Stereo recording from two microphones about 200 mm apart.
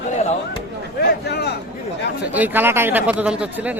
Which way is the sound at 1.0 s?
55° left (ahead or behind).